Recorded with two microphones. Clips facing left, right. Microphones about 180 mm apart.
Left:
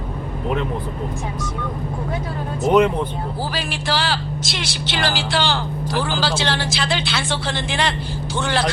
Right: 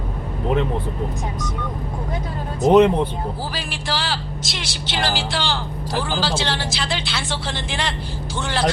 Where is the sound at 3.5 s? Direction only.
70° left (ahead or behind).